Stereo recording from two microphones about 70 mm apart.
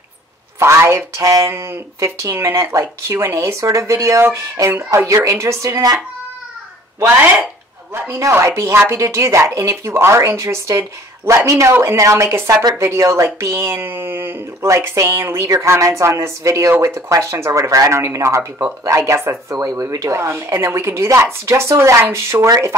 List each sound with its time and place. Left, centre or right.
0.6 s speech: right
1.5 s speech: right
7.9 s speech: right
14.6 s speech: right